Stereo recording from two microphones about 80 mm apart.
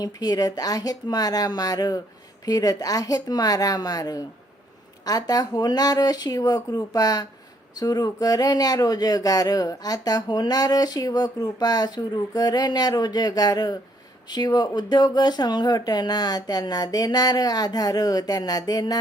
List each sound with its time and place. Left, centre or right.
0.0 s speech: left